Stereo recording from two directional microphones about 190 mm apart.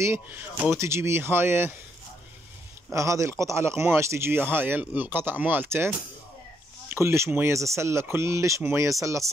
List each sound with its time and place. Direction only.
0.0 s speech: 10° right (ahead or behind)
2.9 s speech: 15° right (ahead or behind)